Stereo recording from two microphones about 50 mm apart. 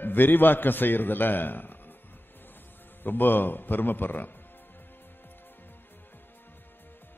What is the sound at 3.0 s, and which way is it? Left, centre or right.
A man's voice, left.